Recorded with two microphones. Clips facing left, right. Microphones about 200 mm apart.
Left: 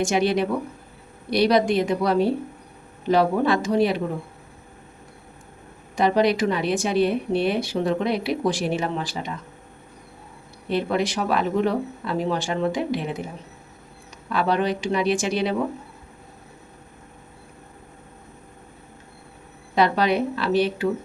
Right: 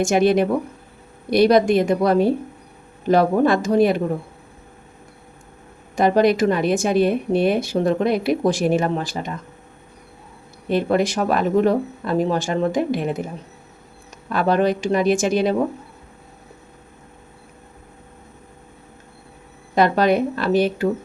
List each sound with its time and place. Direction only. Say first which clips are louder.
0.0 s a woman's voice: right 5 dB; 50° right (ahead or behind)
6.0 s a woman's voice: right 4 dB; 50° right (ahead or behind)
10.7 s a woman's voice: right 4 dB; 45° right (ahead or behind)
14.3 s a woman's voice: right 4 dB; 45° right (ahead or behind)
19.7 s a woman's voice: right 4 dB; 50° right (ahead or behind)